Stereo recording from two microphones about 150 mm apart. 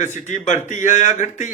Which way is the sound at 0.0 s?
55° left (ahead or behind).